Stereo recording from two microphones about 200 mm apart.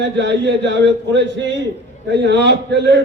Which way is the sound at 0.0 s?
60° right (ahead or behind).